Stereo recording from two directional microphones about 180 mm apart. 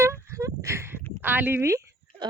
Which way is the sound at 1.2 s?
10° right (ahead or behind).